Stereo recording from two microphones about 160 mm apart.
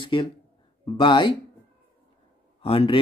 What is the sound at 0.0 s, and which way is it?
Speech, 30° left (ahead or behind).